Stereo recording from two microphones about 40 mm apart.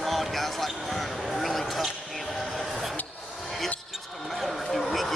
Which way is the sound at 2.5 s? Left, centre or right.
Centre.